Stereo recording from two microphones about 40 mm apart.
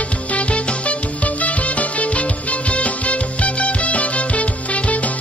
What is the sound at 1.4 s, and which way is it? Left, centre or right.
Music, left.